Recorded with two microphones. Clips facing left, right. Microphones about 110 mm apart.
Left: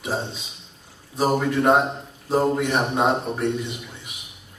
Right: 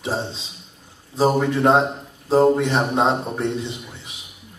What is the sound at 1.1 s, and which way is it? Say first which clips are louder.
A man's voice: right 2 dB; 25° right (ahead or behind).